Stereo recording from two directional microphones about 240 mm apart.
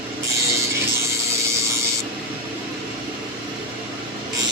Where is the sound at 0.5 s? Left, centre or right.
Centre.